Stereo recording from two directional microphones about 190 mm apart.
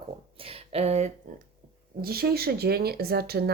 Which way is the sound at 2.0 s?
55° right (ahead or behind).